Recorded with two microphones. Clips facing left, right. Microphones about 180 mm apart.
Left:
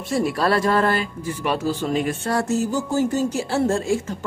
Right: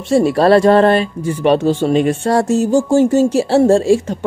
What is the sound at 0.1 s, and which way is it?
Speech, 25° right (ahead or behind).